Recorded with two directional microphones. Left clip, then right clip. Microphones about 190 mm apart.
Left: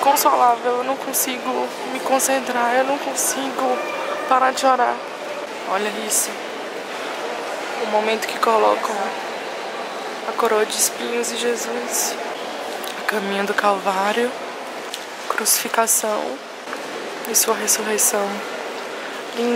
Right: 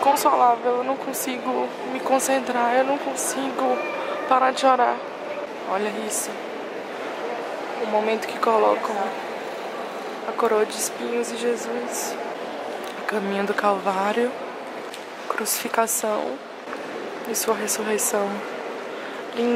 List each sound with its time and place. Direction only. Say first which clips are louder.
0.0 s a sound: left 3 dB; 5° right (ahead or behind)
0.3 s speech: left 2 dB; 15° right (ahead or behind)
7.9 s speech: left 3 dB; 10° right (ahead or behind)
10.4 s speech: left 3 dB; 10° right (ahead or behind)
15.3 s speech: left 4 dB; 5° right (ahead or behind)
17.6 s speech: left 4 dB; 5° right (ahead or behind)